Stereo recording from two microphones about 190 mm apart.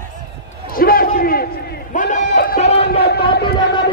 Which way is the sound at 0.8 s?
50° left (ahead or behind).